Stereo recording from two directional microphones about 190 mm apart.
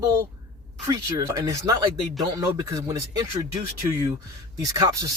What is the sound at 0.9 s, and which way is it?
Speech, 20° right (ahead or behind).